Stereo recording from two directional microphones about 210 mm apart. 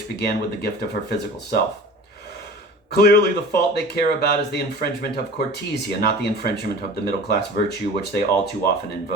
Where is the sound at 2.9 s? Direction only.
50° left (ahead or behind).